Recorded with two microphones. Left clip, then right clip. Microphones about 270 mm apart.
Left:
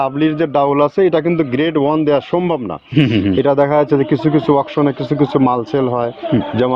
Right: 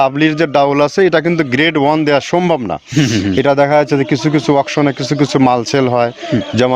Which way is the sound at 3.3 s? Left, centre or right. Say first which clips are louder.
Right 3 dB; right.